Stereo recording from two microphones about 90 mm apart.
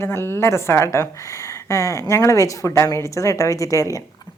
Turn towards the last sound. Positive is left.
turn(degrees=35)  # may be behind; listen again after turning